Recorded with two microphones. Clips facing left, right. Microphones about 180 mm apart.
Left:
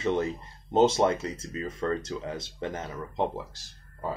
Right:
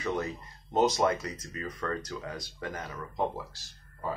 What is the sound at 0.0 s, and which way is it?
Speech, 25° left (ahead or behind).